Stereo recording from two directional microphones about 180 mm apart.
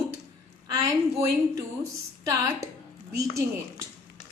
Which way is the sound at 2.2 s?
15° right (ahead or behind).